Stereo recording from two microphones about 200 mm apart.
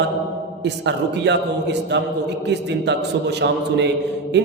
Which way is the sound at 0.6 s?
60° right (ahead or behind).